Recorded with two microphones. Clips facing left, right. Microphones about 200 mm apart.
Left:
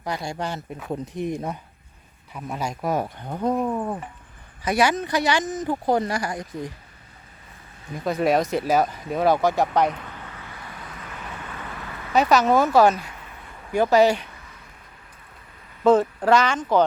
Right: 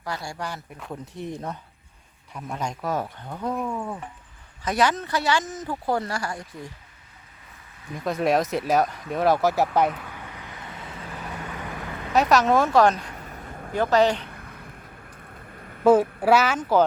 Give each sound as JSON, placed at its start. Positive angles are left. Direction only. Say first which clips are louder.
{"t": 0.0, "sound": "speech", "louder": "left 4 dB", "side_deg": 20}
{"t": 3.5, "sound": "speech", "louder": "left 4 dB", "side_deg": 35}
{"t": 4.6, "sound": "speech", "louder": "left 2 dB", "side_deg": 10}
{"t": 7.9, "sound": "speech", "louder": "left 1 dB", "side_deg": 0}
{"t": 11.3, "sound": "vehicle", "louder": "right 2 dB", "side_deg": -15}
{"t": 12.1, "sound": "speech", "louder": "left 1 dB", "side_deg": 0}
{"t": 13.1, "sound": "a sound", "louder": "right 5 dB", "side_deg": -40}
{"t": 13.7, "sound": "speech", "louder": "left 3 dB", "side_deg": 10}
{"t": 14.3, "sound": "a sound", "louder": "right 5 dB", "side_deg": -55}
{"t": 15.8, "sound": "speech", "louder": "even", "side_deg": -10}